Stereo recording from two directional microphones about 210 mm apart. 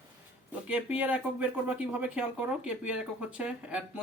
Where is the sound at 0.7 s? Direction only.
10° right (ahead or behind).